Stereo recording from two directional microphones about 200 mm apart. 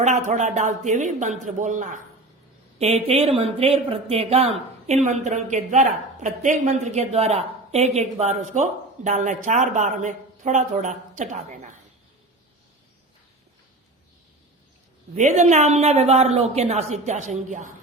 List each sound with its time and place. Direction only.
0.0 s a woman's voice: 35° right (ahead or behind)
15.1 s a woman's voice: 35° right (ahead or behind)